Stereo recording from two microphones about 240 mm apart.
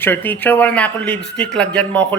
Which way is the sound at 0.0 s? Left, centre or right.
Centre.